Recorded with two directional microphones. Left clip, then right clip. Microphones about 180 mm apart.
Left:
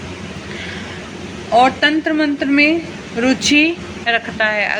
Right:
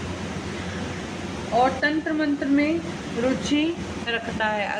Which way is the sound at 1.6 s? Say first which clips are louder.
Left 8 dB; 25° left (ahead or behind).